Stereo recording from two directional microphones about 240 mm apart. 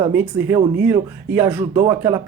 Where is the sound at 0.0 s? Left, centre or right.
Centre.